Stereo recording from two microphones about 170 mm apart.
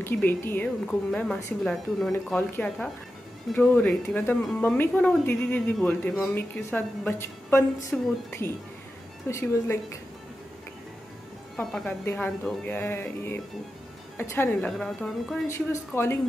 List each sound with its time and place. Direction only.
0.0 s speech: 10° left (ahead or behind)
11.5 s speech: 5° left (ahead or behind)
15.4 s speech: 15° left (ahead or behind)